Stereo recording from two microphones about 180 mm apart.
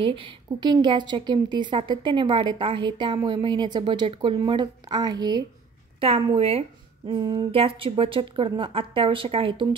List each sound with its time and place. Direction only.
0.0 s a woman's voice: 30° right (ahead or behind)